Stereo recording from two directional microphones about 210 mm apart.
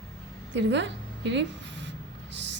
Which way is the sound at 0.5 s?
60° right (ahead or behind).